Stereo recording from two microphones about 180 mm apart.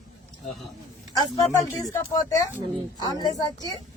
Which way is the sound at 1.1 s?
20° left (ahead or behind).